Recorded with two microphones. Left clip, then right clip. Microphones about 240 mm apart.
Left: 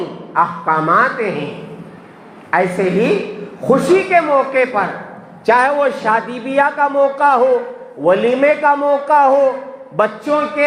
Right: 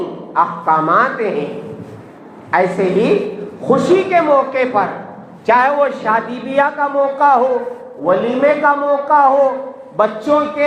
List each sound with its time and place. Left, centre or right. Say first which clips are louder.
0.3 s a man's voice: right 1 dB; left
2.5 s a man's voice: right 1 dB; left